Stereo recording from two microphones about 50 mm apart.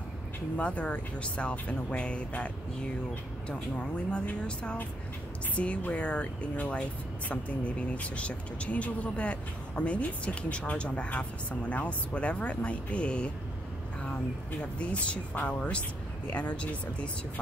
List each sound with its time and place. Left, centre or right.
0.6 s speech: left
4.1 s speech: left